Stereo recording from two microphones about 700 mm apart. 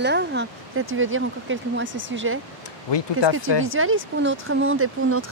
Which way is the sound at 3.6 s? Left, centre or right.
Centre.